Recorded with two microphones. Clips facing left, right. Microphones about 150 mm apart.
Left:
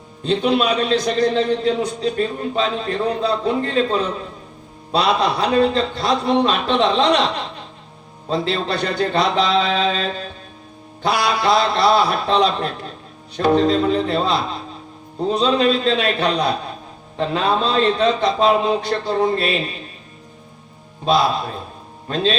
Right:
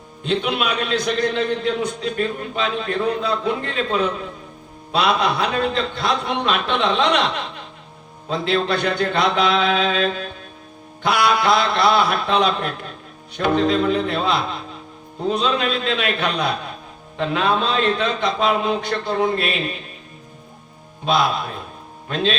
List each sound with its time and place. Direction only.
0.2 s a man's voice: 40° left (ahead or behind)
11.0 s a man's voice: 40° left (ahead or behind)
21.0 s a man's voice: 35° left (ahead or behind)